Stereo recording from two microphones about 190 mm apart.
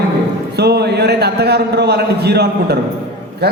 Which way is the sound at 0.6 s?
60° right (ahead or behind).